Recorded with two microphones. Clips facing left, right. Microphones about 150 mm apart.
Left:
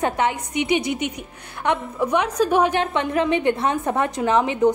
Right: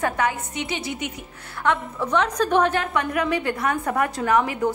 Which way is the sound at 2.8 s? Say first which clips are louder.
Left 3 dB; 25° left (ahead or behind).